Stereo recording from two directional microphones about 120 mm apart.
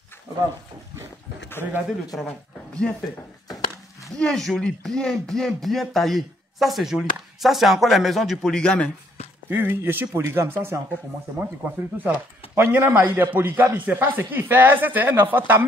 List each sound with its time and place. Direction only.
2.1 s speech: 5° left (ahead or behind)
4.2 s speech: 5° left (ahead or behind)
9.5 s speech: 15° right (ahead or behind)